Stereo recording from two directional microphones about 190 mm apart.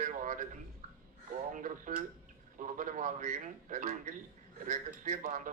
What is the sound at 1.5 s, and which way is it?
Speech, 45° right (ahead or behind).